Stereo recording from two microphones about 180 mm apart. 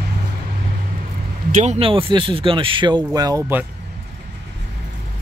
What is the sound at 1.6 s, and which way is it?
Speech, 35° right (ahead or behind).